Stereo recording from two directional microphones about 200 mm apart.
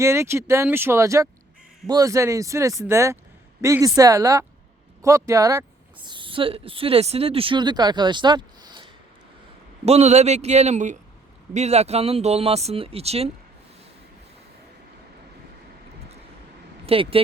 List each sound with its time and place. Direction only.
0.0 s speech: 15° right (ahead or behind); by 13.3 s 30° right (ahead or behind)
16.8 s speech: 30° right (ahead or behind)